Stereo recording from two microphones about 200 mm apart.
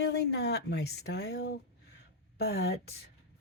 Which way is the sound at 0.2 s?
55° left (ahead or behind).